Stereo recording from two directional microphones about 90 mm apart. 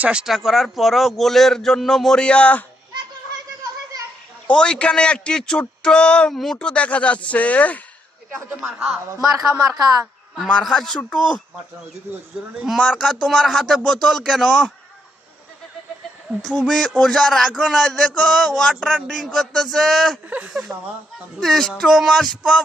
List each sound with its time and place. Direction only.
0.0 s a man's voice: 10° right (ahead or behind); by 2.6 s 15° left (ahead or behind)
4.4 s speech: 10° left (ahead or behind)
9.2 s a woman's voice: 35° right (ahead or behind)
10.4 s speech: 5° left (ahead or behind)
12.3 s speech: 10° right (ahead or behind)
13.0 s a man's voice: 10° left (ahead or behind)
16.4 s a man's voice: centre (ahead or behind)